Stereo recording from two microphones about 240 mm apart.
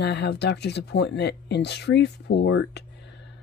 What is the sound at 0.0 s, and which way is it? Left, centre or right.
Speech, left.